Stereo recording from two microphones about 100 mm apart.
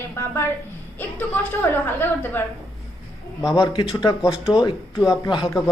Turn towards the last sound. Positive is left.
turn(degrees=50)  # may be behind; listen again after turning